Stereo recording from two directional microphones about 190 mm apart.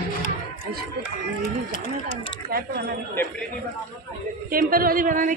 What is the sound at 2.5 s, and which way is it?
Speech, 55° right (ahead or behind).